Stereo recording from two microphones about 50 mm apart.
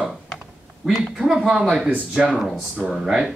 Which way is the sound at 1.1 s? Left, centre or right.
Centre.